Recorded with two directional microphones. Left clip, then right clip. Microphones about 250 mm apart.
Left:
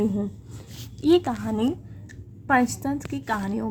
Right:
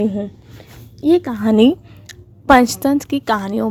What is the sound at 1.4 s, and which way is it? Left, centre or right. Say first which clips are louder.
A woman's voice: right 14 dB; right.